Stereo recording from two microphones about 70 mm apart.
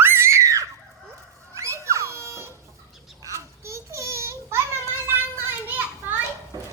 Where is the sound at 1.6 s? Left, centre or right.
Right.